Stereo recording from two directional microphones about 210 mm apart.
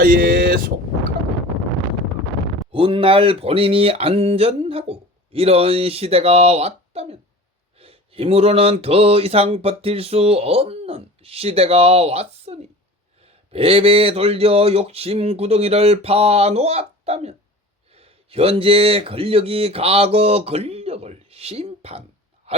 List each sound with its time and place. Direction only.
0.0 s vehicle: 45° right (ahead or behind)
2.7 s speech: 25° right (ahead or behind)
22.5 s a sound: 30° right (ahead or behind)